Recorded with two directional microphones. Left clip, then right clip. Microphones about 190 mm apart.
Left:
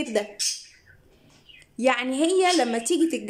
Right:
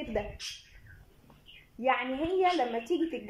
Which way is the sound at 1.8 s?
25° left (ahead or behind).